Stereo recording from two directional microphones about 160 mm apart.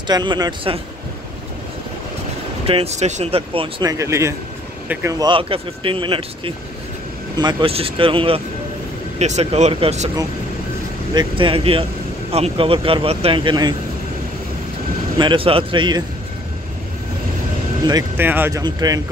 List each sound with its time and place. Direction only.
0.1 s speech: 25° right (ahead or behind)
2.6 s speech: 40° right (ahead or behind)
3.8 s speech: 20° right (ahead or behind)
5.2 s speech: 35° right (ahead or behind)
11.1 s speech: 30° right (ahead or behind)
15.1 s speech: 30° right (ahead or behind)
18.1 s speech: 10° right (ahead or behind)
18.6 s speech: 25° right (ahead or behind)